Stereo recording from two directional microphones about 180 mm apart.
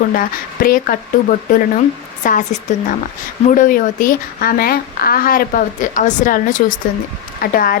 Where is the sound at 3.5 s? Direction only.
50° left (ahead or behind).